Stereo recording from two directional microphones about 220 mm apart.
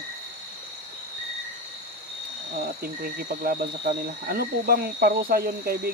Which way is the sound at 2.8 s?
40° right (ahead or behind).